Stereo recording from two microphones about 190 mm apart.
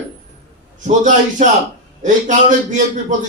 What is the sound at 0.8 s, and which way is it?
Speech, 40° right (ahead or behind).